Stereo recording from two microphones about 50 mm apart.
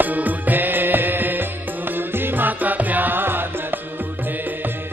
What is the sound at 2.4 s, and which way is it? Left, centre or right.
Music, right.